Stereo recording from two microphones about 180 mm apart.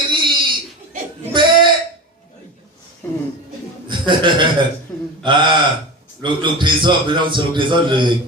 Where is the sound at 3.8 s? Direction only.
25° right (ahead or behind).